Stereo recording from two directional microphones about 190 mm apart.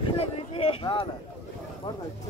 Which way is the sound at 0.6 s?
25° left (ahead or behind).